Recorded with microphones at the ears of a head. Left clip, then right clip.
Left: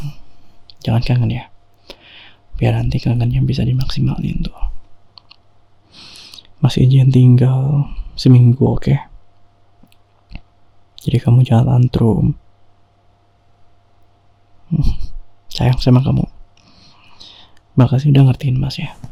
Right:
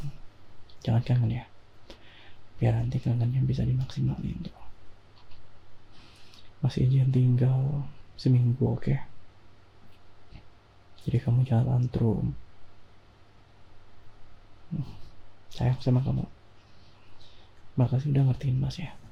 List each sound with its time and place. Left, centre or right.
0.7 s speech: left
5.9 s speech: left
10.9 s speech: left
14.7 s a sound: left